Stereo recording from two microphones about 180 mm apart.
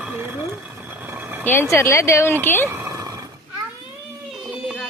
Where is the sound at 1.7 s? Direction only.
15° left (ahead or behind).